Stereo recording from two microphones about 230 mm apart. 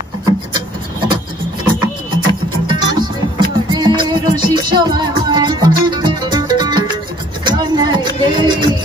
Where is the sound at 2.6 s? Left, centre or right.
Centre.